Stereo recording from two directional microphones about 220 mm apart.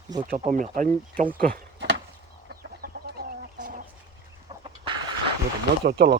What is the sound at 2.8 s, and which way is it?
Chicken, 45° right (ahead or behind).